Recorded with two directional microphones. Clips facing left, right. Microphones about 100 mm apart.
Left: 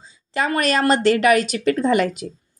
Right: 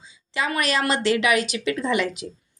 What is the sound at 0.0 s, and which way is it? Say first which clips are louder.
A woman's voice: left 4 dB; 40° left (ahead or behind).